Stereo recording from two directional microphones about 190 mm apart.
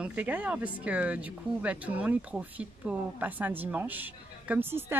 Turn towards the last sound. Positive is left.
turn(degrees=-10)  # may be behind; listen again after turning